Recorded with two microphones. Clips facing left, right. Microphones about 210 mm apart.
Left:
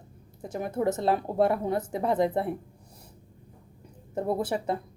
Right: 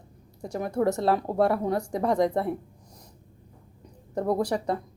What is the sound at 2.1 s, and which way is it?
Speech, 5° left (ahead or behind).